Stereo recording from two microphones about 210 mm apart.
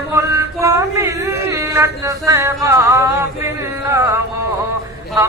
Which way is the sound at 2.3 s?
15° right (ahead or behind).